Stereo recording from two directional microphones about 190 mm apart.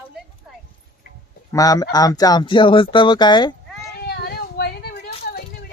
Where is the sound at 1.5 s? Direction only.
20° left (ahead or behind).